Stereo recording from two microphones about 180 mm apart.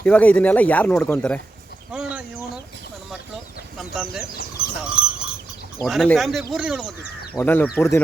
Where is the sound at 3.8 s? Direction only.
Centre (ahead or behind).